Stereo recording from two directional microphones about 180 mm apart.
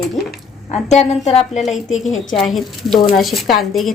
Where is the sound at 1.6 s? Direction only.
Centre (ahead or behind).